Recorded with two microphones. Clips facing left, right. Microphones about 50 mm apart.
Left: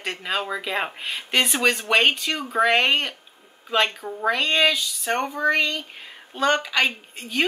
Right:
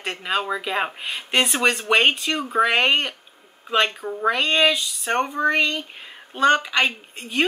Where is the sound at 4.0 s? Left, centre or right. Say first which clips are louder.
Right 2 dB; centre.